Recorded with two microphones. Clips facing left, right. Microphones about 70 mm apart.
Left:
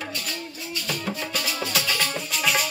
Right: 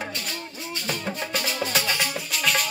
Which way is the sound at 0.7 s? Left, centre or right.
Right.